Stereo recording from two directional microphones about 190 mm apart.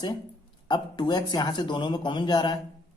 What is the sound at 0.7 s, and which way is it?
Speech, 25° left (ahead or behind).